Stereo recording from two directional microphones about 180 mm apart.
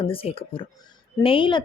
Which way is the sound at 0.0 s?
30° left (ahead or behind).